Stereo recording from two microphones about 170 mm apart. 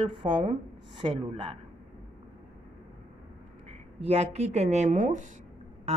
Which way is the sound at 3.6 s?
35° right (ahead or behind).